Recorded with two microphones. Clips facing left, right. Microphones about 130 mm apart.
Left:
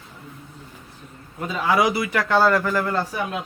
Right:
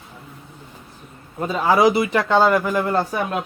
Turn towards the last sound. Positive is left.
turn(degrees=-50)  # may be behind; listen again after turning